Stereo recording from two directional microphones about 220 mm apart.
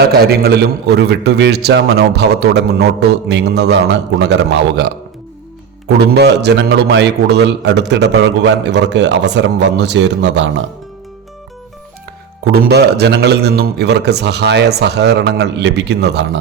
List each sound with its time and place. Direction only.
0.0 s a man's voice: 45° right (ahead or behind)
6.1 s a man's voice: 50° right (ahead or behind)
12.5 s a man's voice: 45° right (ahead or behind)